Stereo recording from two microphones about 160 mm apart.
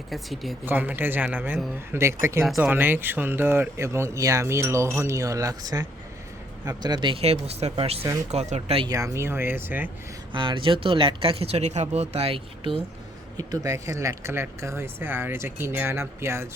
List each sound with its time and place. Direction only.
0.1 s speech: centre (ahead or behind)
0.6 s speech: 10° right (ahead or behind); by 8.9 s 40° right (ahead or behind)
8.9 s speech: 20° right (ahead or behind)
10.3 s speech: 30° right (ahead or behind)
13.3 s speech: 20° right (ahead or behind)